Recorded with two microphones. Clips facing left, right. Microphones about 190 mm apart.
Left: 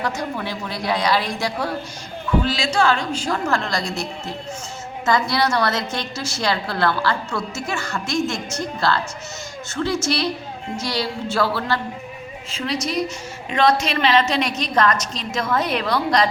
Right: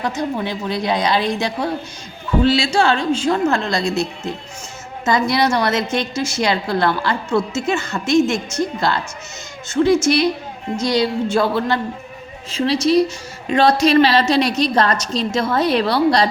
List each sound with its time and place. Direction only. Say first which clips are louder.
0.0 s a woman's voice: right 4 dB; 20° right (ahead or behind)
5.0 s a woman's voice: right 3 dB; 20° right (ahead or behind)
12.5 s a woman's voice: right 9 dB; 30° right (ahead or behind)